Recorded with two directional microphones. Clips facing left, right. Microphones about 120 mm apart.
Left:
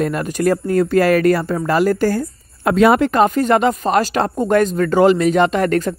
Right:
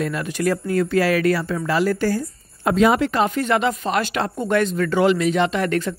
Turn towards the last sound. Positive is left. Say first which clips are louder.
# left 5 dB
turn(degrees=45)  # may be behind; listen again after turning